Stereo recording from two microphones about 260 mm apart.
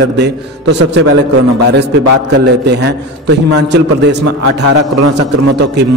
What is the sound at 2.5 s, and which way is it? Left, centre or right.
A man's voice, right.